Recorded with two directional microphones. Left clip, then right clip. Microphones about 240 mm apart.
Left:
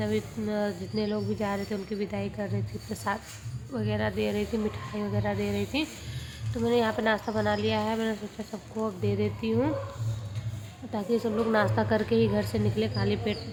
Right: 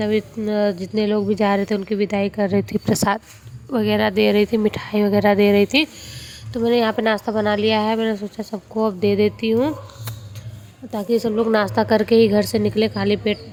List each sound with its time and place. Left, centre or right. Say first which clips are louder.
0.0 s speech: right 10 dB; right
10.9 s speech: right 8 dB; right